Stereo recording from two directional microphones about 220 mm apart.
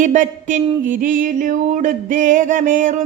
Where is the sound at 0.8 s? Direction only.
35° right (ahead or behind).